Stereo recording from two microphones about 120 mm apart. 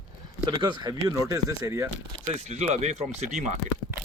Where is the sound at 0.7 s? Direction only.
40° right (ahead or behind).